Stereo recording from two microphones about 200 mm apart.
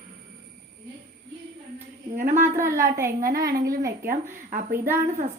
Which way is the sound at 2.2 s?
40° right (ahead or behind).